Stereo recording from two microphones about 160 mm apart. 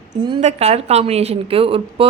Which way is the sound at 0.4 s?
40° right (ahead or behind).